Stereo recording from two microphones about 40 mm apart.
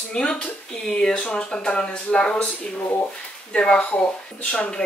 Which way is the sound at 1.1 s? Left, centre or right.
Left.